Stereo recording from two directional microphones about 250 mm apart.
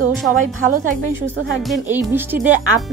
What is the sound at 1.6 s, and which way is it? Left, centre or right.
Speech, centre.